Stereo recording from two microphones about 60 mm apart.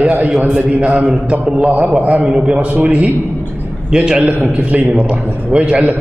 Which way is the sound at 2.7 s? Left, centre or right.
Right.